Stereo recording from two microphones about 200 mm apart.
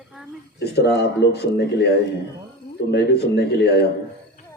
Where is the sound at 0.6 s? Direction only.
55° left (ahead or behind).